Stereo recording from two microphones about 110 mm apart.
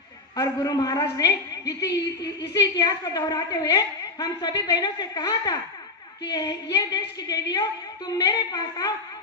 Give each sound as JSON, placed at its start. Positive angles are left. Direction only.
{"t": 0.3, "sound": "a woman's voice", "side_deg": 35}